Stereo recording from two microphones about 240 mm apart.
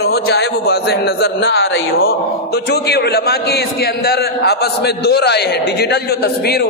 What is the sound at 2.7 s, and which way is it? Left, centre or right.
A man's voice, left.